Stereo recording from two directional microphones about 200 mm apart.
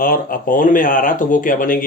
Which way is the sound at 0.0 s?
45° left (ahead or behind).